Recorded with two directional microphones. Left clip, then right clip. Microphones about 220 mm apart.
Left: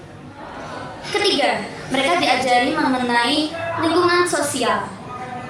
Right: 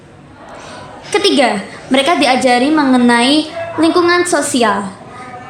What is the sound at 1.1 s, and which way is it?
A woman's voice, 50° right (ahead or behind).